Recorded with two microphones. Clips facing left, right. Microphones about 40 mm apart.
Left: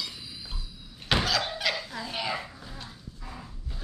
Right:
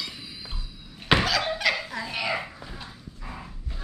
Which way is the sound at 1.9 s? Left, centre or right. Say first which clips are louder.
Right 4 dB; centre.